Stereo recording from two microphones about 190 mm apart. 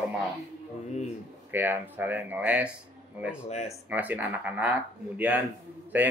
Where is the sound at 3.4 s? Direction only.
35° left (ahead or behind).